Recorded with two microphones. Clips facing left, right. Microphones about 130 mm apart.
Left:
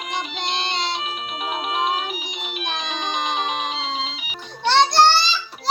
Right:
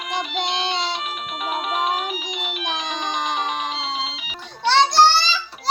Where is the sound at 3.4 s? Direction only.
15° left (ahead or behind).